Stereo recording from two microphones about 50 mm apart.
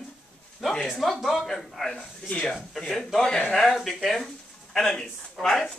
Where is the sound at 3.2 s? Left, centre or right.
Left.